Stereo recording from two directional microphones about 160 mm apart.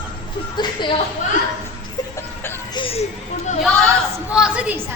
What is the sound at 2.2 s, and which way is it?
Music, 15° left (ahead or behind).